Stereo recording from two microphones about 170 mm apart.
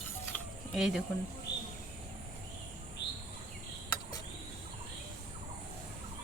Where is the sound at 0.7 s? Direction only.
Centre (ahead or behind).